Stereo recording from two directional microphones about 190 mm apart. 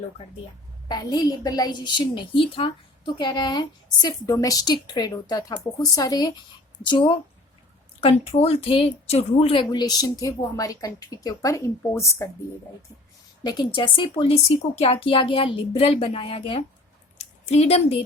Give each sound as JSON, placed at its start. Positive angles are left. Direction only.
{"t": 0.9, "sound": "a woman's voice", "side_deg": 20}
{"t": 8.3, "sound": "a woman's voice", "side_deg": 30}
{"t": 13.4, "sound": "a woman's voice", "side_deg": 20}